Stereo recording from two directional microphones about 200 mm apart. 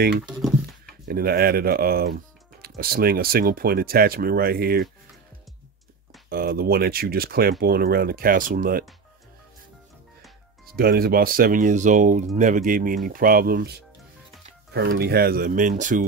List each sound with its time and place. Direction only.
1.0 s speech: 50° right (ahead or behind)
6.2 s speech: 50° right (ahead or behind)
10.8 s speech: 50° right (ahead or behind)